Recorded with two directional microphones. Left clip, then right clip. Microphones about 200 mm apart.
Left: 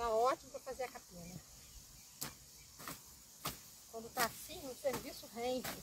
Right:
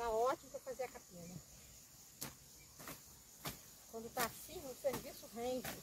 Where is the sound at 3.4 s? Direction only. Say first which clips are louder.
Left 4 dB; 10° left (ahead or behind).